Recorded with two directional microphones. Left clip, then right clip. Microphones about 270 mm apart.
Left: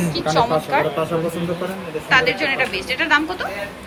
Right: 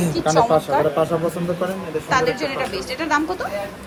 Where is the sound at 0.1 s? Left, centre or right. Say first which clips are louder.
Right 2 dB; centre.